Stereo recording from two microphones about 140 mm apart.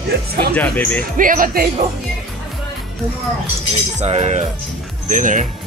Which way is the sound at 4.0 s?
50° right (ahead or behind).